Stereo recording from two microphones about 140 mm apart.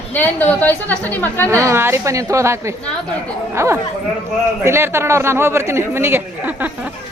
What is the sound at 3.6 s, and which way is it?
A man's voice, 20° right (ahead or behind).